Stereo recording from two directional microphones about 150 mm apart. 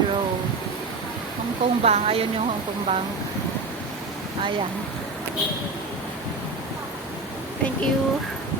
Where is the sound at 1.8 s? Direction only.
45° right (ahead or behind).